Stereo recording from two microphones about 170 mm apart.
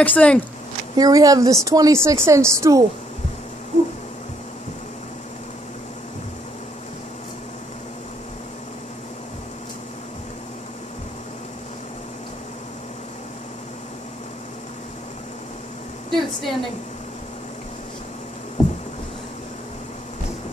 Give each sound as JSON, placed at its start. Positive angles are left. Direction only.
{"t": 0.0, "sound": "speech", "side_deg": 10}
{"t": 0.9, "sound": "a woman's voice", "side_deg": -20}
{"t": 16.1, "sound": "a sound", "side_deg": 0}